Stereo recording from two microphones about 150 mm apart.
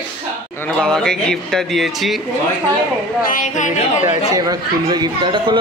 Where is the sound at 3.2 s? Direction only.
65° left (ahead or behind).